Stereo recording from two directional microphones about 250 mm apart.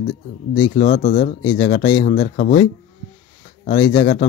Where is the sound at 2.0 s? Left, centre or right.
Left.